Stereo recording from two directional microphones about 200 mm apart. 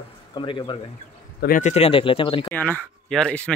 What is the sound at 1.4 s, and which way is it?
Speech, 40° left (ahead or behind).